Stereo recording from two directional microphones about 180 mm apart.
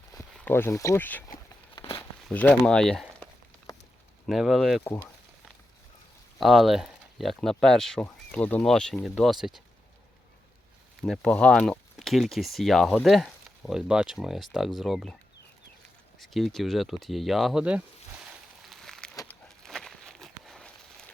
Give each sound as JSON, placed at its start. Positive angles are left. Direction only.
{"t": 0.1, "sound": "speech", "side_deg": 15}
{"t": 1.7, "sound": "crumpling", "side_deg": 30}
{"t": 2.0, "sound": "speech", "side_deg": 10}
{"t": 4.3, "sound": "speech", "side_deg": 0}
{"t": 4.8, "sound": "speech", "side_deg": 10}
{"t": 6.4, "sound": "speech", "side_deg": 0}
{"t": 11.0, "sound": "speech", "side_deg": 0}
{"t": 16.1, "sound": "speech", "side_deg": 0}
{"t": 18.3, "sound": "a sound", "side_deg": 0}
{"t": 19.5, "sound": "walk", "side_deg": 0}